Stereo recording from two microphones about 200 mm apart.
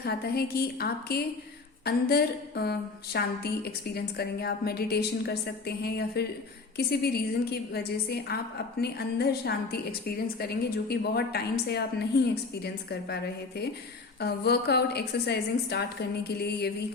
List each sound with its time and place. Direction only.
0.0 s a woman's voice: 50° left (ahead or behind)
14.2 s a woman's voice: 55° left (ahead or behind)